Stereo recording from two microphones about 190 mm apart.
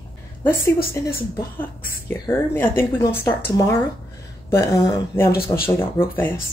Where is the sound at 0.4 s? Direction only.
15° left (ahead or behind).